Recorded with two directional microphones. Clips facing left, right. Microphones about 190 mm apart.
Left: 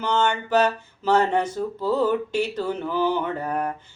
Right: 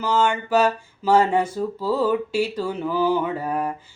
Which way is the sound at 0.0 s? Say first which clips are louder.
Right 2 dB; 5° right (ahead or behind).